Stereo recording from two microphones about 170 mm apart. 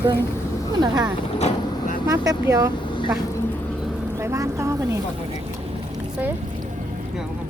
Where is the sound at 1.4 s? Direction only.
40° left (ahead or behind).